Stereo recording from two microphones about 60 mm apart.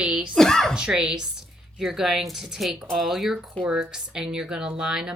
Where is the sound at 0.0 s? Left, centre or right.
Centre.